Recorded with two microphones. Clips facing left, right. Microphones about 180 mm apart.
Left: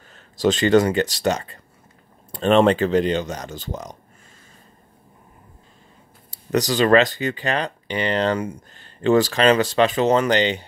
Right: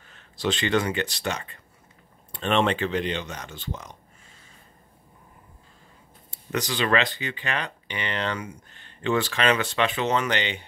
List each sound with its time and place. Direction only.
0.1 s speech: 40° left (ahead or behind)
6.3 s speech: 40° left (ahead or behind)